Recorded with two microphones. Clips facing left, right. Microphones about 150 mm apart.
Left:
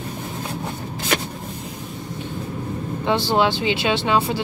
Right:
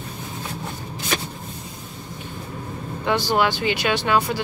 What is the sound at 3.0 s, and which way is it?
Speech, 25° left (ahead or behind).